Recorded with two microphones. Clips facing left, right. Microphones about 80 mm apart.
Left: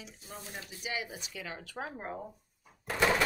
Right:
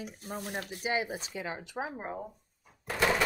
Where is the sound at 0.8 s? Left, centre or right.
Right; by 2.3 s centre.